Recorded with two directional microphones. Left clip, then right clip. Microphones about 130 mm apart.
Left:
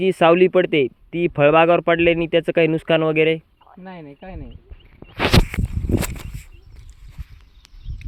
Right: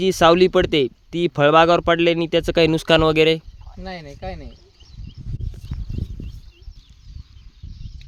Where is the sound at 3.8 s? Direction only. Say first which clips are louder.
Right 5 dB; 30° right (ahead or behind).